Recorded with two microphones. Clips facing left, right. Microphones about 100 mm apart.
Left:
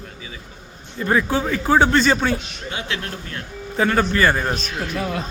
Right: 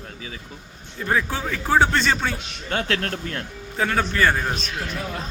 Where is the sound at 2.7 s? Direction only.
50° right (ahead or behind).